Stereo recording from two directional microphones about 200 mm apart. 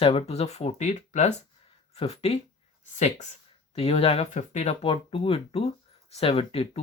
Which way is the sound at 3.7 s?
30° left (ahead or behind).